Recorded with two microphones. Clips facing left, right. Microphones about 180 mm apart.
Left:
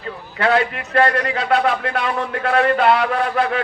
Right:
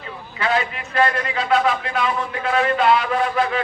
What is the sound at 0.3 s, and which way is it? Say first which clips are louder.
A man's voice: left 4 dB; 60° left (ahead or behind).